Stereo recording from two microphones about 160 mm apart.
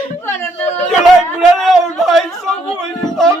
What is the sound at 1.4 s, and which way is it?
A man's voice, centre (ahead or behind).